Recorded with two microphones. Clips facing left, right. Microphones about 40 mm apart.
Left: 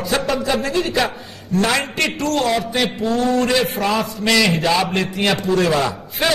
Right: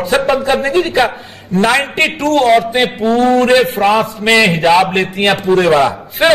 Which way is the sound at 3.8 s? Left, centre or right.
Right.